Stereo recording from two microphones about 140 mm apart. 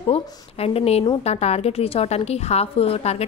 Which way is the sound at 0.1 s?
45° left (ahead or behind).